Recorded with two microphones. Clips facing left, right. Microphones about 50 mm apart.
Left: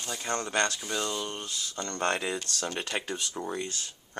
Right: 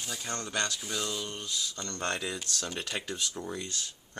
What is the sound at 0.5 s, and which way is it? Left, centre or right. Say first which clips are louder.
Speech: left 4 dB; left.